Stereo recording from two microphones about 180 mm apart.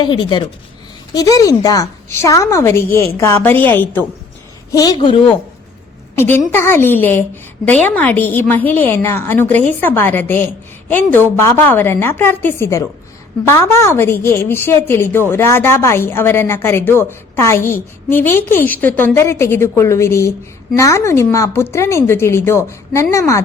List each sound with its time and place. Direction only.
0.0 s a man's voice: 25° left (ahead or behind)
4.7 s a man's voice: 20° left (ahead or behind)
6.1 s a woman's voice: 10° left (ahead or behind)